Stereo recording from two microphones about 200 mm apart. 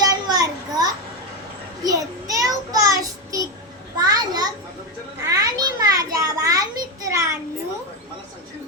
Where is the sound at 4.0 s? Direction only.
20° right (ahead or behind).